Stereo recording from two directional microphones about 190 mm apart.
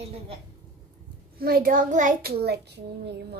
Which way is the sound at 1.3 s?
55° right (ahead or behind).